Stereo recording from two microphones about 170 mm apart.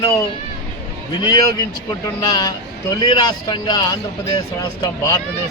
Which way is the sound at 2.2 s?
25° left (ahead or behind).